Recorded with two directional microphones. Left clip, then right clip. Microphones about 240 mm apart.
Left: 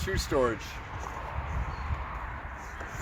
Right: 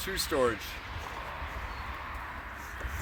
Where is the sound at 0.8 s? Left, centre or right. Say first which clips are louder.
Left 1 dB; right.